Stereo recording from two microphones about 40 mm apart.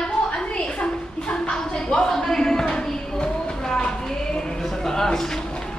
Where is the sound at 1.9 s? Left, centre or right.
Centre.